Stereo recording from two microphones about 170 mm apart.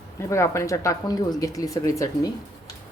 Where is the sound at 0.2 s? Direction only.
15° left (ahead or behind).